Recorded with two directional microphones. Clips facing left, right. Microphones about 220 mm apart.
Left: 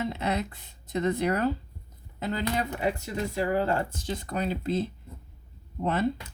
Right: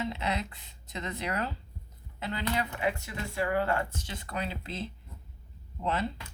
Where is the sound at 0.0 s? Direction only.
50° left (ahead or behind).